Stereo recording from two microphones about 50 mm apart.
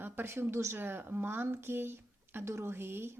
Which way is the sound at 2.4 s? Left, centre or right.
Right.